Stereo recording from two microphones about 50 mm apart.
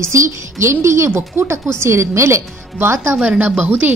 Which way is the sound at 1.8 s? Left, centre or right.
Right.